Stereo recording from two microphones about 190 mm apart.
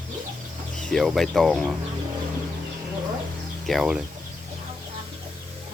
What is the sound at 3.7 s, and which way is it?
Speech, centre (ahead or behind).